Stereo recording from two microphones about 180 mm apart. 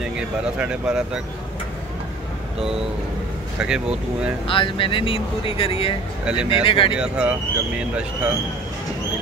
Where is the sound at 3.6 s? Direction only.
5° right (ahead or behind).